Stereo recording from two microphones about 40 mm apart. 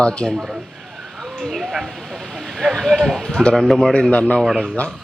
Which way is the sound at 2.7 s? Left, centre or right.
Centre.